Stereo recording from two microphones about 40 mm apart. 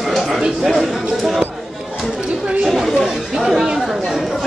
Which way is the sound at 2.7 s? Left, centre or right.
Centre.